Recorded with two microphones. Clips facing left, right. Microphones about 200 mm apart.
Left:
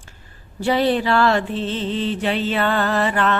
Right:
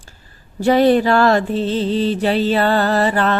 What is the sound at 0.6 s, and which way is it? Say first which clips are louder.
Mantra: right 6 dB; 45° right (ahead or behind).